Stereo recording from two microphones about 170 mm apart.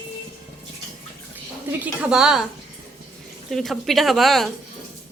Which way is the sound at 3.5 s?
Centre (ahead or behind).